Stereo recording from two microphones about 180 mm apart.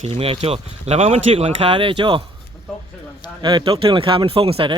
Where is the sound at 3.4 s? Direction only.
25° right (ahead or behind).